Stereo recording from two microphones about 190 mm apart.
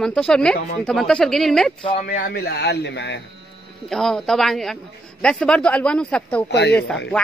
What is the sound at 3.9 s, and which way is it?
Speech, centre (ahead or behind).